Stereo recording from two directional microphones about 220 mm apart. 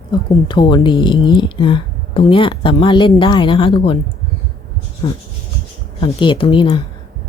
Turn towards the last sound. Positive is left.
turn(degrees=20)  # may be behind; listen again after turning